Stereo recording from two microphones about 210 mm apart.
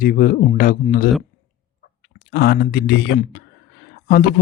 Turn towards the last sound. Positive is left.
turn(degrees=45)  # may be behind; listen again after turning